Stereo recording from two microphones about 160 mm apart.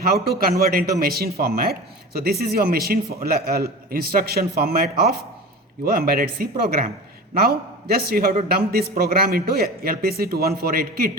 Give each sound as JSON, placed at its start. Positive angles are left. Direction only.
{"t": 0.0, "sound": "a man's voice", "side_deg": -70}